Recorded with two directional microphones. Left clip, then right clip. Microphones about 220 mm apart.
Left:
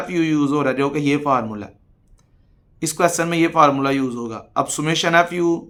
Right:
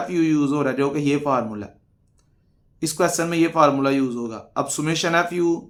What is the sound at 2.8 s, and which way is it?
A man's voice, 25° left (ahead or behind).